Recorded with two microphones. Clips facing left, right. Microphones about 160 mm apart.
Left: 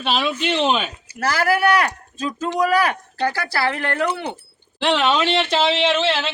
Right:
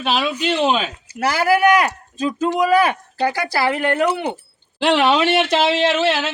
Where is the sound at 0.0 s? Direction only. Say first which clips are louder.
Right 1 dB; 5° right (ahead or behind).